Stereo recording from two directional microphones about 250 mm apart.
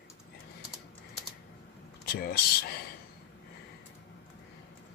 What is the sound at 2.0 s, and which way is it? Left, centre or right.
Speech, left.